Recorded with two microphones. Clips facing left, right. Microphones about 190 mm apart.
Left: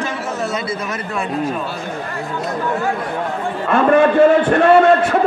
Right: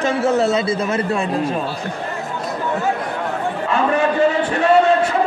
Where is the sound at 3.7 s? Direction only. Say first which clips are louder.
Left 6 dB; 55° left (ahead or behind).